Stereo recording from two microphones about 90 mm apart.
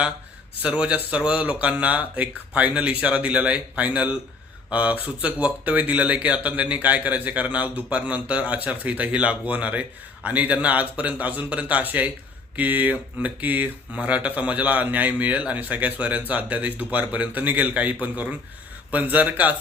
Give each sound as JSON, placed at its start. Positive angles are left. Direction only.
{"t": 0.6, "sound": "speech", "side_deg": -10}